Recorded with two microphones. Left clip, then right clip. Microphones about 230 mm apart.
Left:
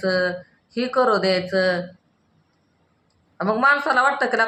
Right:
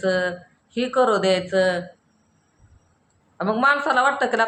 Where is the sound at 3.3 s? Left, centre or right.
Centre.